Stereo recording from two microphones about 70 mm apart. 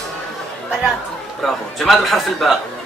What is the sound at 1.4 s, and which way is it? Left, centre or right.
A man's voice, centre.